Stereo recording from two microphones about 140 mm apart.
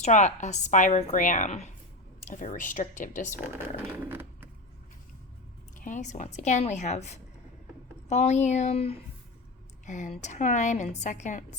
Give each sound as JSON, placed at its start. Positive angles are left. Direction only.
{"t": 0.0, "sound": "a woman's voice", "side_deg": 55}
{"t": 2.3, "sound": "a woman's voice", "side_deg": 65}
{"t": 3.6, "sound": "a sound", "side_deg": -15}
{"t": 5.8, "sound": "a woman's voice", "side_deg": 60}
{"t": 9.8, "sound": "a woman's voice", "side_deg": 60}